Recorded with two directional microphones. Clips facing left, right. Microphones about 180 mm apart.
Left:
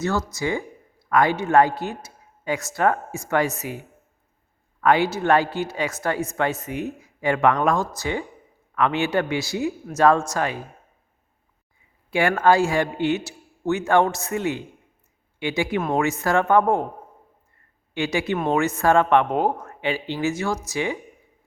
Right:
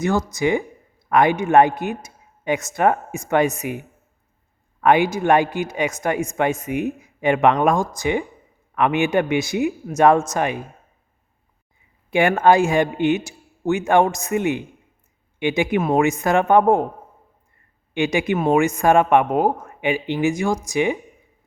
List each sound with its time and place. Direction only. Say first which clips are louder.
0.0 s a man's voice: right 4 dB; 15° right (ahead or behind)
12.1 s speech: right 3 dB; 20° right (ahead or behind)
17.9 s speech: right 4 dB; 20° right (ahead or behind)